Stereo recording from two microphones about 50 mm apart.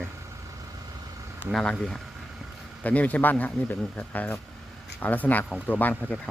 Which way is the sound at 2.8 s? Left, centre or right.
Left.